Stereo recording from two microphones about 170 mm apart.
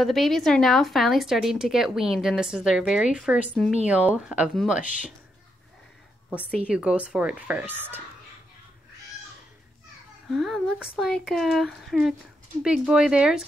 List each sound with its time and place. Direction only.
0.0 s a woman's voice: centre (ahead or behind)
4.8 s speech: 50° left (ahead or behind)
6.7 s speech: 5° right (ahead or behind)
10.3 s a woman's voice: centre (ahead or behind)